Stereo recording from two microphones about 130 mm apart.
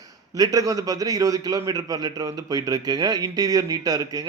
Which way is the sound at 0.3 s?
25° right (ahead or behind).